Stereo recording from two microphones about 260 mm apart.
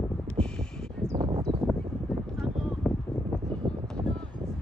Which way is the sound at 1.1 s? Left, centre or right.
Centre.